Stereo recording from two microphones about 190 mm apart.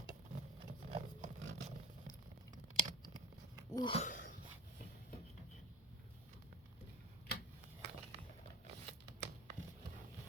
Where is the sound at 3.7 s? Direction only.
25° left (ahead or behind).